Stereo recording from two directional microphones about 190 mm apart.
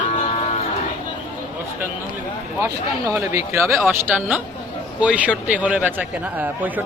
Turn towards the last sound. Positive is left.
turn(degrees=-10)  # may be behind; listen again after turning